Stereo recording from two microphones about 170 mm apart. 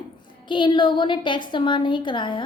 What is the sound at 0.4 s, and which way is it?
A woman's voice, 30° left (ahead or behind).